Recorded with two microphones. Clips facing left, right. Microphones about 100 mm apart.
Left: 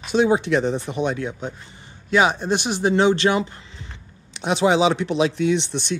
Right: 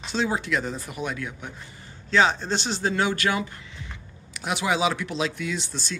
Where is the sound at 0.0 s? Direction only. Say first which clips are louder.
Left 8 dB; 15° left (ahead or behind).